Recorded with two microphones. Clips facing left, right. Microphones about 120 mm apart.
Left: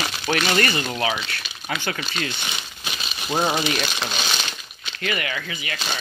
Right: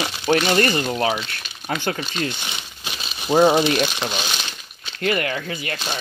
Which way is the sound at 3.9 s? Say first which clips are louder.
Right 2 dB; 10° right (ahead or behind).